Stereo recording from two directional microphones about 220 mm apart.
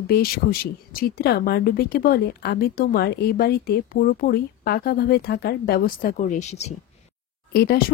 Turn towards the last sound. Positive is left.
turn(degrees=45)  # may be behind; listen again after turning